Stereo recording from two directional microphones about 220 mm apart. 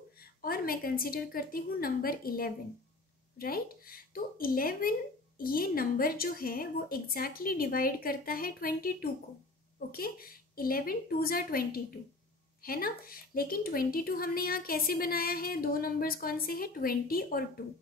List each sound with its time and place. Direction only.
0.2 s speech: 40° left (ahead or behind)